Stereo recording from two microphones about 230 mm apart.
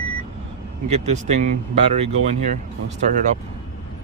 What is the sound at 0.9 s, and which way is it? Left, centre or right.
Speech, right.